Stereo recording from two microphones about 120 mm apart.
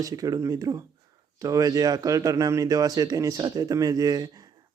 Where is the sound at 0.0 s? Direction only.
30° right (ahead or behind).